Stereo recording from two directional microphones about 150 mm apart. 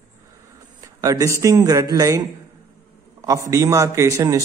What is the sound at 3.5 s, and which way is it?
Speech, 20° right (ahead or behind).